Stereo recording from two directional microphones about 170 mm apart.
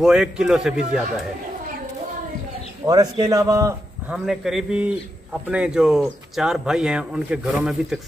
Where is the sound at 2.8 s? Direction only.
20° right (ahead or behind).